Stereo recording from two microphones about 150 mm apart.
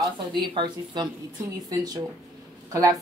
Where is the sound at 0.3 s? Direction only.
30° right (ahead or behind).